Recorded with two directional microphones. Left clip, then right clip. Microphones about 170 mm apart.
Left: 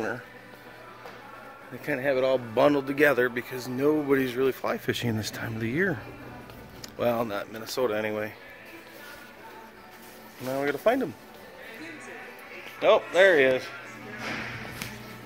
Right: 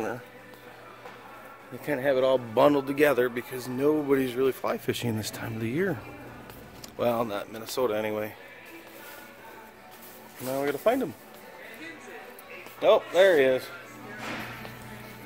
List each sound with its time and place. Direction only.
1.9 s speech: 30° right (ahead or behind); by 5.9 s 10° right (ahead or behind)
7.0 s speech: 15° right (ahead or behind)
10.4 s speech: centre (ahead or behind)
12.8 s speech: 20° right (ahead or behind)